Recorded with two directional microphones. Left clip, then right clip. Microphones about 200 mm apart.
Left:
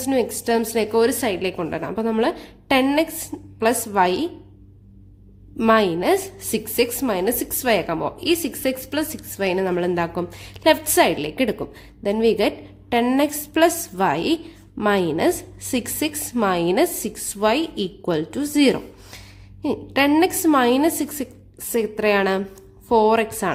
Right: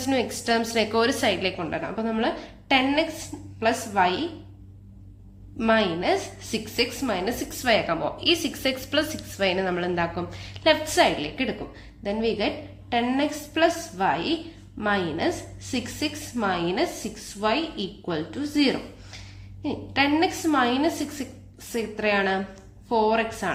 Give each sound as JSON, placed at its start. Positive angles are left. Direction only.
{"t": 0.0, "sound": "a woman's voice", "side_deg": 25}
{"t": 5.5, "sound": "a woman's voice", "side_deg": 35}